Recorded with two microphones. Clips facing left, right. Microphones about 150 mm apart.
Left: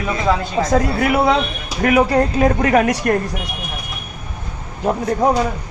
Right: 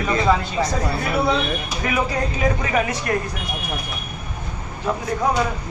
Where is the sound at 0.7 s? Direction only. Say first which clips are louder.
Left 7 dB; 90° left.